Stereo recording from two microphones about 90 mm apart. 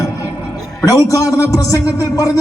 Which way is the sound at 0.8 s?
35° left (ahead or behind).